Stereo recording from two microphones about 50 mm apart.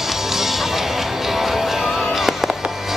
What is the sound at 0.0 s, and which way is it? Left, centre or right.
Music, centre.